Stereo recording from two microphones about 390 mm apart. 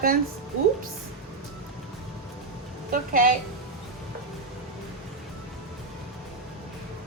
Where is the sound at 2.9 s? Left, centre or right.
Right.